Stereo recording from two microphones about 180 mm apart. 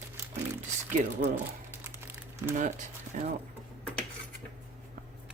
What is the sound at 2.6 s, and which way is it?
Speech, 45° right (ahead or behind).